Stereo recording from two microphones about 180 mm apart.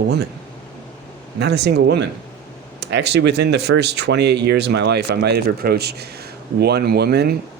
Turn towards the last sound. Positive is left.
turn(degrees=-60)  # may be behind; listen again after turning